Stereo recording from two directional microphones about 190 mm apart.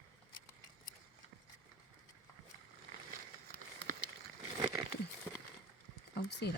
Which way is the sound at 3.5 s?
50° right (ahead or behind).